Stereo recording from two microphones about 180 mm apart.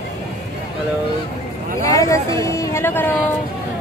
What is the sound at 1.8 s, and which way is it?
Speech, 15° left (ahead or behind).